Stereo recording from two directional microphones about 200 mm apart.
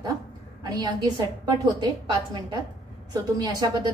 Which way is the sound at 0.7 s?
20° right (ahead or behind).